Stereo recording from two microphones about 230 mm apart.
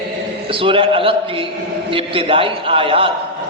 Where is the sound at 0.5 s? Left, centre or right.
Right.